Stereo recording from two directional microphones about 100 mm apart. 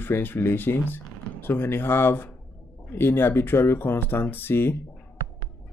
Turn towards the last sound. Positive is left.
turn(degrees=20)  # may be behind; listen again after turning